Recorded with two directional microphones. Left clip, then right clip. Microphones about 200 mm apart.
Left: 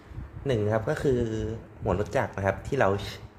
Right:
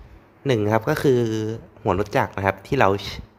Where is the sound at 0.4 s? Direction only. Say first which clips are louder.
Right 6 dB; 30° right (ahead or behind).